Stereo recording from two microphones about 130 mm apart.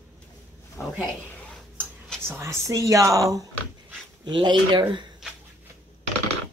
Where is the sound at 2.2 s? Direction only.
20° right (ahead or behind).